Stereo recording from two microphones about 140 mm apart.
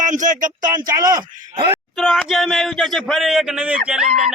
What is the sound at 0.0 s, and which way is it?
Speech, 65° right (ahead or behind).